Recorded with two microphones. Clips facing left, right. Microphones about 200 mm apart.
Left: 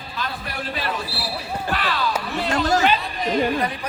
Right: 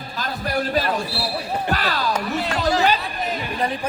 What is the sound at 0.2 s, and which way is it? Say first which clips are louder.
Music: right 6 dB; 40° right (ahead or behind).